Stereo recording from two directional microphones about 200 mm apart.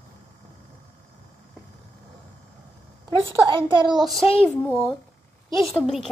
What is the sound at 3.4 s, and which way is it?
Speech, 25° right (ahead or behind).